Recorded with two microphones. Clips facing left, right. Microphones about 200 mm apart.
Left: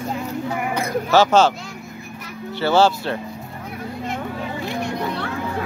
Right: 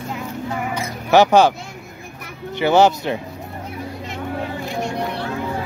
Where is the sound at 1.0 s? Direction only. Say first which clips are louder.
Right 3 dB; 15° right (ahead or behind).